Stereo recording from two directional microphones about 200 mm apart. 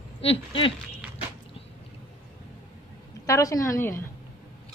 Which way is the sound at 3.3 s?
15° left (ahead or behind).